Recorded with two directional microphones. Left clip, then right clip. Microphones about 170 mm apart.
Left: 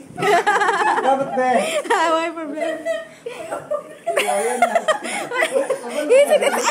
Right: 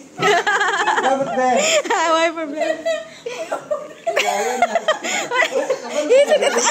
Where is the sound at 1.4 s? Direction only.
Centre (ahead or behind).